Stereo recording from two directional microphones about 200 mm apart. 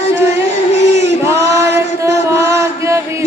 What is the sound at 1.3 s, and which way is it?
Chant, 15° right (ahead or behind).